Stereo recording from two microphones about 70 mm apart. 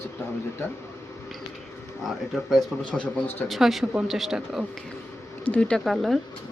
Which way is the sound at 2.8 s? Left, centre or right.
Centre.